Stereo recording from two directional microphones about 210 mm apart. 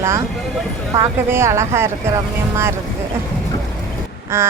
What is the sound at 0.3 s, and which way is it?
Vehicle, centre (ahead or behind).